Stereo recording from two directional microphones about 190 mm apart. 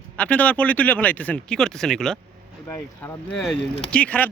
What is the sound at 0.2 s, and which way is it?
Speech, 5° left (ahead or behind).